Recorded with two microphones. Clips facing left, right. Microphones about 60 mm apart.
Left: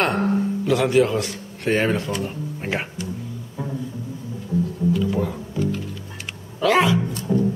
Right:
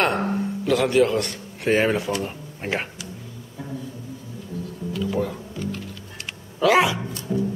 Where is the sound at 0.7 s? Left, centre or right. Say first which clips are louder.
Even; centre.